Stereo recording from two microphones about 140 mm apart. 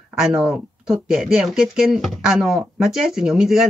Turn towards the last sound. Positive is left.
turn(degrees=0)  # may be behind; listen again after turning